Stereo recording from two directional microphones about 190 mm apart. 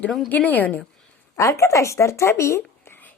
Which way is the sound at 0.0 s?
5° left (ahead or behind).